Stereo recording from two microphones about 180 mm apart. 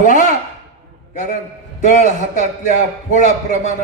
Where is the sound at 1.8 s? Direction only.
45° left (ahead or behind).